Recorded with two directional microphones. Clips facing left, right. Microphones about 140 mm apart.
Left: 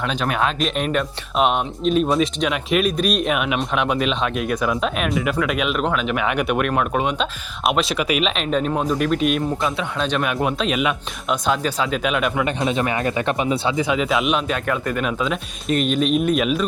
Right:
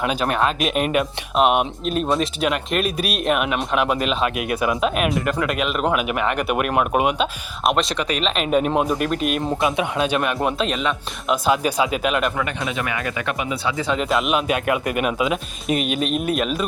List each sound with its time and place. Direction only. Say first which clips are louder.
0.0 s speech: right 1 dB; 5° right (ahead or behind)
8.4 s speech: right 2 dB; 10° right (ahead or behind)
10.2 s speech: even; centre (ahead or behind)
11.3 s speech: right 2 dB; 5° right (ahead or behind)
12.5 s speech: left 5 dB; 25° left (ahead or behind)
13.8 s speech: left 1 dB; 5° left (ahead or behind)